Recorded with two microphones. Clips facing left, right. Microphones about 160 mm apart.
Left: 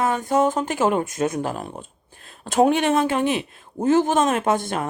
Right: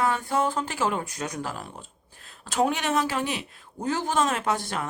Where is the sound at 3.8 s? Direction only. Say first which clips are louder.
Left 8 dB; 50° left (ahead or behind).